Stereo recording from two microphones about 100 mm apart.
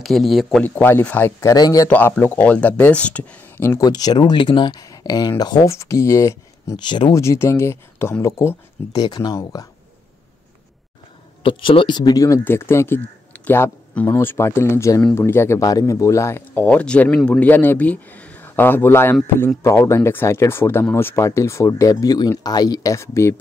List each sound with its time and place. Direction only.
0.0 s speech: centre (ahead or behind)
0.7 s speech: 20° left (ahead or behind)
1.4 s speech: 40° left (ahead or behind)
1.9 s speech: 15° left (ahead or behind)
3.8 s speech: 40° left (ahead or behind)
5.7 s speech: 30° left (ahead or behind)
6.8 s speech: 50° left (ahead or behind)
7.2 s speech: 30° left (ahead or behind)
8.9 s speech: 40° left (ahead or behind)
11.4 s speech: 60° left (ahead or behind); by 12.4 s 35° left (ahead or behind)
12.4 s speech: 25° left (ahead or behind)
16.6 s speech: 10° left (ahead or behind); by 23.3 s 30° left (ahead or behind)